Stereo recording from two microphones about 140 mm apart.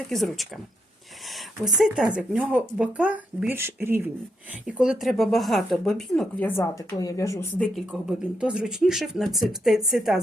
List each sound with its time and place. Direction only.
0.1 s speech: centre (ahead or behind); by 4.0 s 15° right (ahead or behind)
4.6 s speech: 5° right (ahead or behind)
6.4 s a woman's voice: 15° left (ahead or behind)
7.6 s speech: centre (ahead or behind)